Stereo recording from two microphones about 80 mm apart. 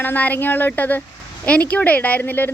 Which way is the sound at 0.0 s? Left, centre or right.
Left.